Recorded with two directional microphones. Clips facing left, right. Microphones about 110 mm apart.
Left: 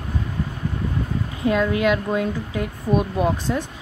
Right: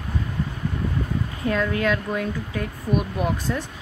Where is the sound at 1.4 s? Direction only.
15° left (ahead or behind).